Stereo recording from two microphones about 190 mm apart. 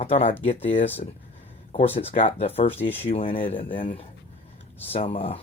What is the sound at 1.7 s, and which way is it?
Speech, 35° left (ahead or behind).